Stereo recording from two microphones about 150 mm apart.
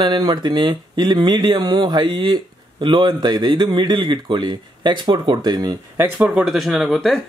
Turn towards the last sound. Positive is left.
turn(degrees=5)  # may be behind; listen again after turning